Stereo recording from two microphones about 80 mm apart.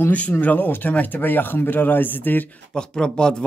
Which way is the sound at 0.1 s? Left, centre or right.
Centre.